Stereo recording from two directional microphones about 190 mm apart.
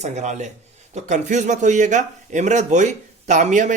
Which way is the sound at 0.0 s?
40° right (ahead or behind).